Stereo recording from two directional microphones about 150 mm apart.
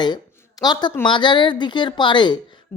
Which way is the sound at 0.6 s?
30° left (ahead or behind).